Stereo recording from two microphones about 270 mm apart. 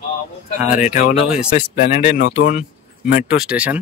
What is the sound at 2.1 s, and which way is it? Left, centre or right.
Speech, left.